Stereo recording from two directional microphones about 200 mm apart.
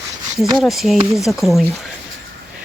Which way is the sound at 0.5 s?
Centre (ahead or behind).